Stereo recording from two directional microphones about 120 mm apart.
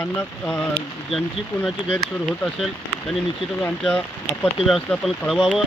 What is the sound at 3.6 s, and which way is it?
Speech, 10° left (ahead or behind).